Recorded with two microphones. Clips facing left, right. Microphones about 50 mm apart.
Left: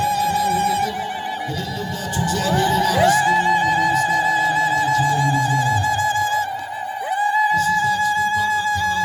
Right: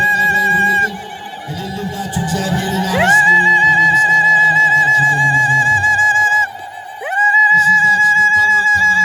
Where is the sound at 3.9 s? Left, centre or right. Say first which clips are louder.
Right 8 dB; right.